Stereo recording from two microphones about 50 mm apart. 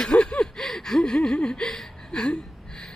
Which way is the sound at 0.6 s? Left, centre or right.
Centre.